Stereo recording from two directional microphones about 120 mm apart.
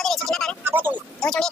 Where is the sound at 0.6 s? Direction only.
15° right (ahead or behind).